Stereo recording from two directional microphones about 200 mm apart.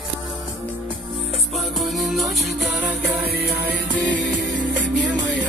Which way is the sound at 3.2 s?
50° right (ahead or behind).